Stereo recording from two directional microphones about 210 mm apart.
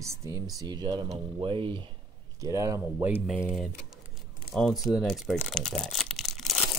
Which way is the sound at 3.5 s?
Centre (ahead or behind).